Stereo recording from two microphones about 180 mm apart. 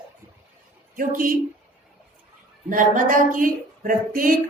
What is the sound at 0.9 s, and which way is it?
Speech, 50° right (ahead or behind).